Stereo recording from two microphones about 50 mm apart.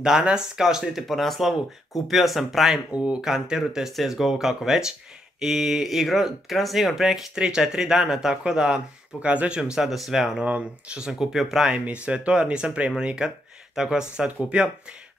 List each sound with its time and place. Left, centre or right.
0.1 s speech: centre
1.0 s speech: centre
2.9 s speech: right
3.3 s speech: centre
7.3 s speech: centre
9.8 s speech: centre
10.4 s speech: right; by 11.7 s centre
11.7 s speech: right